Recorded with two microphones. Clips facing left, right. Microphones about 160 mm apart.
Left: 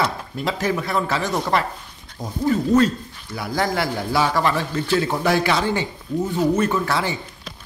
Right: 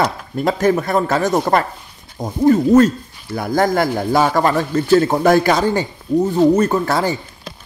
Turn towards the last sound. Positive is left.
turn(degrees=-40)  # may be behind; listen again after turning